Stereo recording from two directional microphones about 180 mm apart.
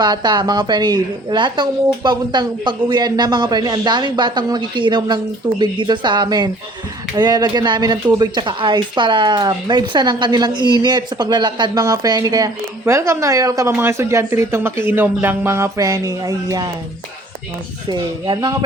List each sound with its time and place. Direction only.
0.0 s speech: 25° right (ahead or behind)
17.8 s speech: 25° right (ahead or behind)